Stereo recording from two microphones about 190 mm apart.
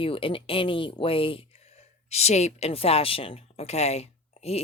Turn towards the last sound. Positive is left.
turn(degrees=35)  # may be behind; listen again after turning